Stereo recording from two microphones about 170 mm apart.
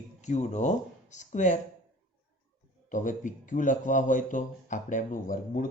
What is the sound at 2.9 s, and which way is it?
A man's voice, 50° left (ahead or behind).